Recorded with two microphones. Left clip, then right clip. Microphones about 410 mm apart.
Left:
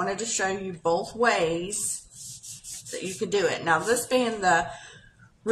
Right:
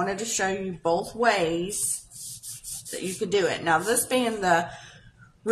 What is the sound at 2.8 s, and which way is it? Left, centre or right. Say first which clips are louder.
A woman's voice: right 1 dB; right.